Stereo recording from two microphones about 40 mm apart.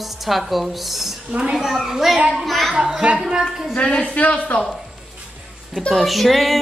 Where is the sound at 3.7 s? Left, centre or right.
Left.